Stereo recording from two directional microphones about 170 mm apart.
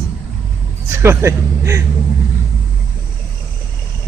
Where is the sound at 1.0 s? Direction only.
15° right (ahead or behind).